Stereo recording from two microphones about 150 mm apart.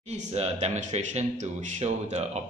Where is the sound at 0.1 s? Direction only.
45° right (ahead or behind).